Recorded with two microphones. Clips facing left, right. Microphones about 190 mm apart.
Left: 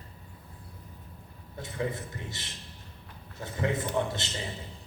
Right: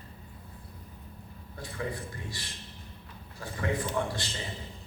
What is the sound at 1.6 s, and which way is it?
A man's voice, 20° left (ahead or behind).